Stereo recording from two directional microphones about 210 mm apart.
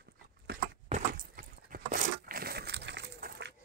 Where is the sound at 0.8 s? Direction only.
35° right (ahead or behind).